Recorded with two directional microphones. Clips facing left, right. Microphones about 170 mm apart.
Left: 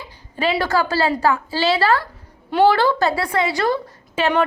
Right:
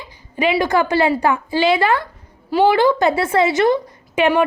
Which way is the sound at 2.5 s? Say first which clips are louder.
Even; 5° right (ahead or behind).